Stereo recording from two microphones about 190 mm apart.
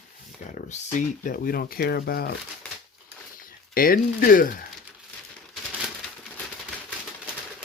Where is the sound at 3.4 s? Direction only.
50° left (ahead or behind).